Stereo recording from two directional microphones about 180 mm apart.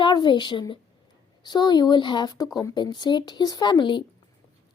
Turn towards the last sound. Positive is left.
turn(degrees=25)  # may be behind; listen again after turning